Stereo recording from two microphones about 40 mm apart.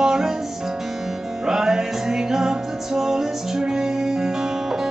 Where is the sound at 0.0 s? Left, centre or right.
Centre.